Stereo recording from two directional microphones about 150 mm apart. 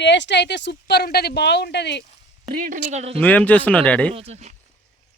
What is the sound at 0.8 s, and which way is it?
Speech, 90° left.